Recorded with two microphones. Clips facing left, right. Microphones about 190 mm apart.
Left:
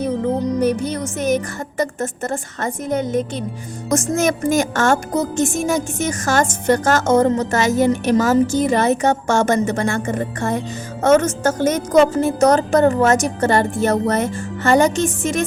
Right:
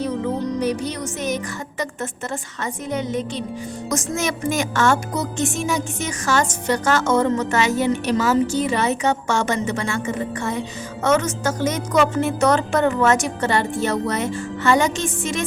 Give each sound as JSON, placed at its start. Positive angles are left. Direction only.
{"t": 0.6, "sound": "music", "side_deg": 50}